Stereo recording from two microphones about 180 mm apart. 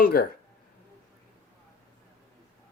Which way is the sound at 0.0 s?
60° left (ahead or behind).